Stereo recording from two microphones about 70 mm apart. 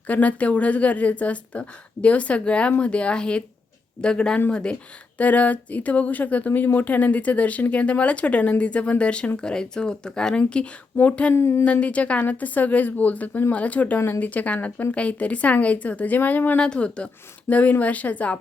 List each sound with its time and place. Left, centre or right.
0.1 s speech: left
11.3 s a sound: left
11.6 s speech: centre
16.6 s speech: centre